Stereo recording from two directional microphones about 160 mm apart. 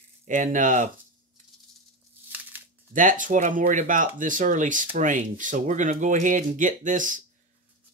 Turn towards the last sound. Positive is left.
turn(degrees=-55)  # may be behind; listen again after turning